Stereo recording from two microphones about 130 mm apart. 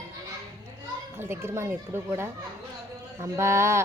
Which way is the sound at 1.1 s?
20° right (ahead or behind).